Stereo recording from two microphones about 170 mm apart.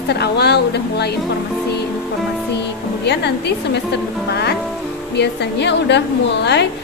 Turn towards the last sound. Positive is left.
turn(degrees=90)